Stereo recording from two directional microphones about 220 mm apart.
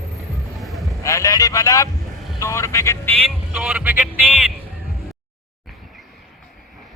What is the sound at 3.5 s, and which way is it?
Speech, 5° right (ahead or behind).